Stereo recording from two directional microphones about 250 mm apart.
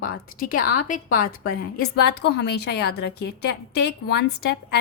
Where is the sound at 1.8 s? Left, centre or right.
Left.